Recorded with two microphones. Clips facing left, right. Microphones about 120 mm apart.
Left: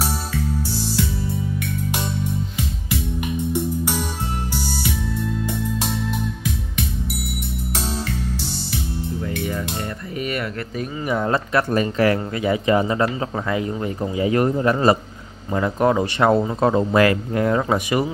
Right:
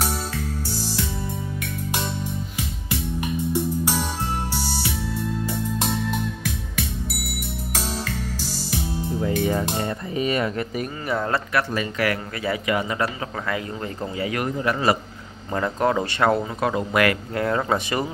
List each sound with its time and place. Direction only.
9.2 s music: 40° right (ahead or behind)
9.8 s a sound: 20° right (ahead or behind)
11.2 s speech: 20° left (ahead or behind)
11.7 s speech: 35° left (ahead or behind); by 14.3 s 20° left (ahead or behind)
14.3 s speech: 30° left (ahead or behind)
15.5 s speech: 15° left (ahead or behind)